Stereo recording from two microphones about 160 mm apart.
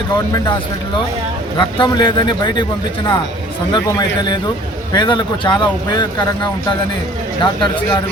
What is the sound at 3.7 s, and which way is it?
A man's voice, 30° left (ahead or behind).